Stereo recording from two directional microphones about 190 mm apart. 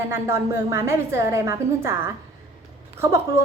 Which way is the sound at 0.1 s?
15° right (ahead or behind).